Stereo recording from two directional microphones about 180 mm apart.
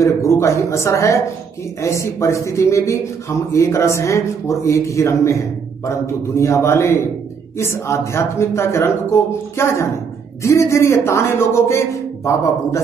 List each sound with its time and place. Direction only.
0.0 s a man's voice: 15° left (ahead or behind)